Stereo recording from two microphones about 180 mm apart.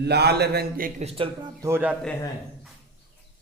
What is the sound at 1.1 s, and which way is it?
Speech, 25° right (ahead or behind).